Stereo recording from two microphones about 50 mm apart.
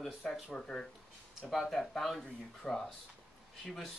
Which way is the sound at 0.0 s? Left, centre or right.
Centre.